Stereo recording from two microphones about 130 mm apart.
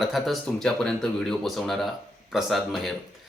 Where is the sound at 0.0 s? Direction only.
Centre (ahead or behind).